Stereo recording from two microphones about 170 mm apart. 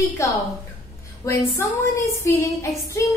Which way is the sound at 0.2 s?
15° left (ahead or behind).